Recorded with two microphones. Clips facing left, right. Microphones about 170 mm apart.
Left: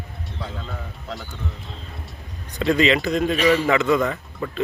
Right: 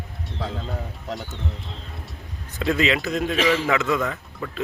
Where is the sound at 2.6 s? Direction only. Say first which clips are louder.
Left 3 dB; 5° right (ahead or behind).